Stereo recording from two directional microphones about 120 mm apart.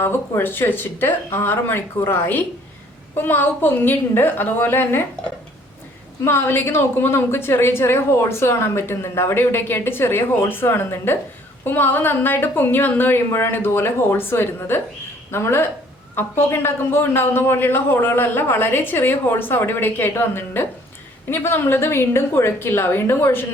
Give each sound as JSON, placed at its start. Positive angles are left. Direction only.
{"t": 0.0, "sound": "a man's voice", "side_deg": 20}
{"t": 6.2, "sound": "a woman's voice", "side_deg": 20}